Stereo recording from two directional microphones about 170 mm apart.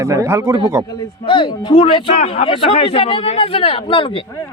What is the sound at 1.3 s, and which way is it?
A man's voice, 30° left (ahead or behind).